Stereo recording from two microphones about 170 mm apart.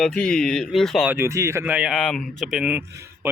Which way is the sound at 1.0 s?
15° right (ahead or behind).